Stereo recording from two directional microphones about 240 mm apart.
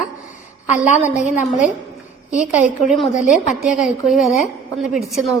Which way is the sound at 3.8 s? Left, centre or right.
Centre.